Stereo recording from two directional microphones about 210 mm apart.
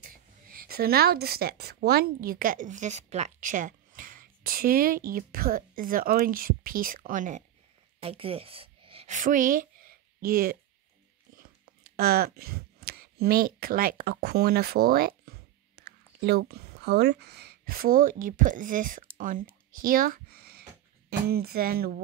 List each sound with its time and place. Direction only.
0.1 s a woman's voice: 45° right (ahead or behind)
8.0 s a woman's voice: 25° right (ahead or behind); by 21.9 s 45° right (ahead or behind)